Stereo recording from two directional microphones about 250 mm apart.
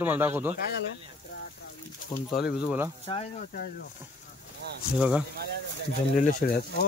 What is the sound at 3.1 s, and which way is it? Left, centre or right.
Speech, centre.